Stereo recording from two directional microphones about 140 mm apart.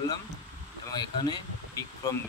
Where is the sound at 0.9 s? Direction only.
30° left (ahead or behind).